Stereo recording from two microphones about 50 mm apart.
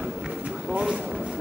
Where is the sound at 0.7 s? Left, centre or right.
Centre.